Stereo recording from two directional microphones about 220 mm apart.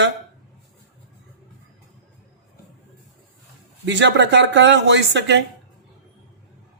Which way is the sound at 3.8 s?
55° right (ahead or behind).